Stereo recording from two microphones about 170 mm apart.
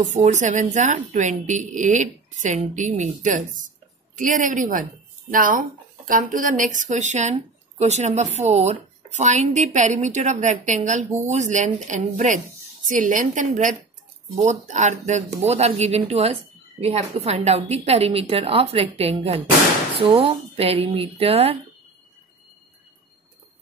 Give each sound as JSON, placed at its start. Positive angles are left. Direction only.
{"t": 0.0, "sound": "a woman's voice", "side_deg": -45}